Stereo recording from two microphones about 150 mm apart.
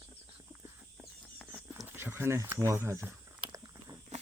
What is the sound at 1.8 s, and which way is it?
Speech, 15° right (ahead or behind).